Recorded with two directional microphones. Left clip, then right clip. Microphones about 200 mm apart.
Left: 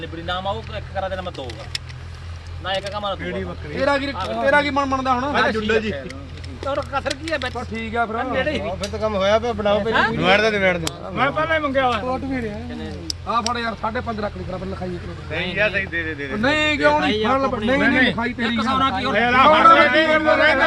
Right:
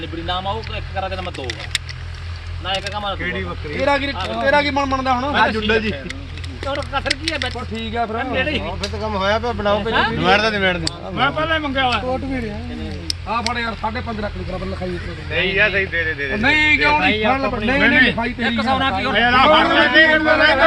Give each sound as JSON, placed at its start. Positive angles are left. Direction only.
{"t": 0.3, "sound": "speech", "side_deg": 10}
{"t": 2.9, "sound": "speech", "side_deg": 15}
{"t": 3.8, "sound": "speech", "side_deg": -5}
{"t": 5.5, "sound": "speech", "side_deg": -35}
{"t": 6.7, "sound": "speech", "side_deg": 5}
{"t": 9.0, "sound": "speech", "side_deg": 45}
{"t": 13.4, "sound": "speech", "side_deg": 5}
{"t": 15.3, "sound": "speech", "side_deg": -35}
{"t": 16.4, "sound": "speech", "side_deg": -10}
{"t": 17.7, "sound": "speech", "side_deg": 20}
{"t": 18.2, "sound": "speech", "side_deg": 0}
{"t": 19.1, "sound": "speech", "side_deg": 30}